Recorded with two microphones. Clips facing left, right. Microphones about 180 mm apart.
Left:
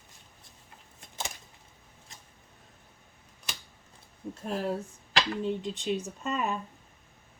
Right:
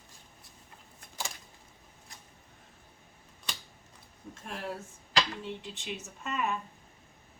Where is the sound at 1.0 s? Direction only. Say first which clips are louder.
Left 2 dB; 20° left (ahead or behind).